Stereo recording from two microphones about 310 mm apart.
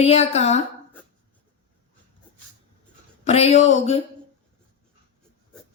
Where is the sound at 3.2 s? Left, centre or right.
Left.